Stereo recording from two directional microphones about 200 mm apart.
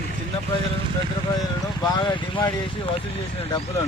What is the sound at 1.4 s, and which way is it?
Speech, 20° left (ahead or behind).